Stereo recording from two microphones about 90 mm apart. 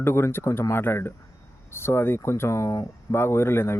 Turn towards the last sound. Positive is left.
turn(degrees=25)  # may be behind; listen again after turning